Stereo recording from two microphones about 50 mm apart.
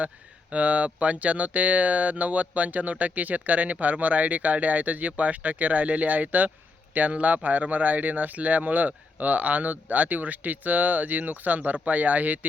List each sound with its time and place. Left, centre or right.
0.5 s speech: right